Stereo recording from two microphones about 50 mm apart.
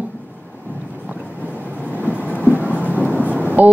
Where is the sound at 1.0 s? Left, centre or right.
Right.